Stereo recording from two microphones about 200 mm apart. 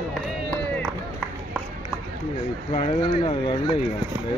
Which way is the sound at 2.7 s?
35° left (ahead or behind).